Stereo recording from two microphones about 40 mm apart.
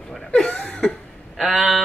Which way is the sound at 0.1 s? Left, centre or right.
Centre.